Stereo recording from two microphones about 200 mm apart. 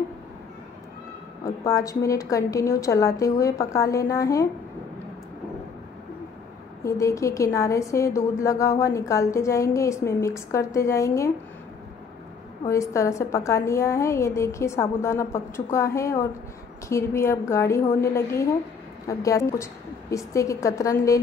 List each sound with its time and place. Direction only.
1.4 s a woman's voice: 15° left (ahead or behind)
6.8 s a woman's voice: 15° left (ahead or behind)
12.6 s a woman's voice: 15° left (ahead or behind)